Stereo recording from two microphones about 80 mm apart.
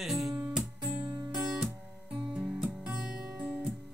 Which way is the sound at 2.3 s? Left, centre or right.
Centre.